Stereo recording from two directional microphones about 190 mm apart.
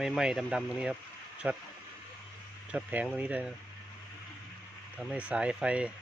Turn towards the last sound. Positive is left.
turn(degrees=-5)  # may be behind; listen again after turning